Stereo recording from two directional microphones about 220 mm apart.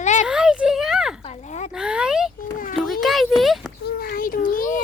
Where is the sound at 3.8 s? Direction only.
45° left (ahead or behind).